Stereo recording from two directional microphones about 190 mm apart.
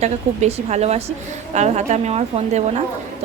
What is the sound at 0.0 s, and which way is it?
Speech, 35° right (ahead or behind).